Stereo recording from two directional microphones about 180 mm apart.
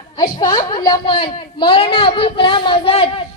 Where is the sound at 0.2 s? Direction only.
25° left (ahead or behind).